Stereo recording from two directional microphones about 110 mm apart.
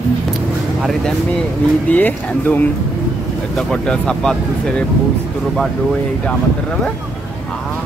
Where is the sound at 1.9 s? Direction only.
15° left (ahead or behind).